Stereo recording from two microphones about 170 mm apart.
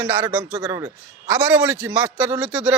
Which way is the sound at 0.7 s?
20° right (ahead or behind).